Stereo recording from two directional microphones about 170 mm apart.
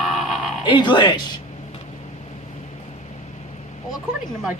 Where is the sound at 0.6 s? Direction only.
25° left (ahead or behind).